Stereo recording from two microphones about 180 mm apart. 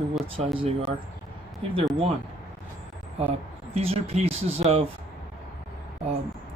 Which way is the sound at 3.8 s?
35° right (ahead or behind).